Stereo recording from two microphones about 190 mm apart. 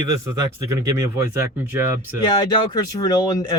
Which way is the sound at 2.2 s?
25° left (ahead or behind).